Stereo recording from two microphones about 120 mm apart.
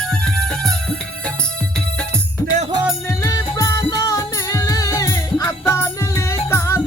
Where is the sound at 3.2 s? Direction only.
25° left (ahead or behind).